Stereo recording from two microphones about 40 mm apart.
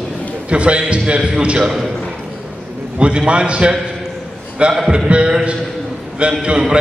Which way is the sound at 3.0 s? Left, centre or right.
Right.